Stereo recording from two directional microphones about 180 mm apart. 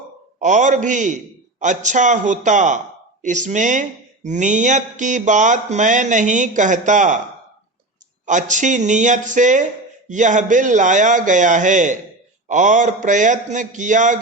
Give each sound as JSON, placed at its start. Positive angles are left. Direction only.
{"t": 0.3, "sound": "speech", "side_deg": -40}
{"t": 8.3, "sound": "speech", "side_deg": -45}